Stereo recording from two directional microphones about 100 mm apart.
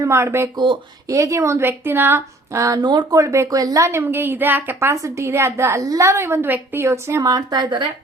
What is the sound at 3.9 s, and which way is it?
A woman's voice, 20° right (ahead or behind).